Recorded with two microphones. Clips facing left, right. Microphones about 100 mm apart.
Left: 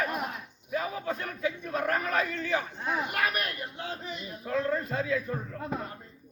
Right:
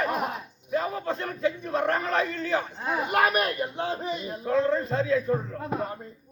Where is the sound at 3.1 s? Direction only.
30° right (ahead or behind).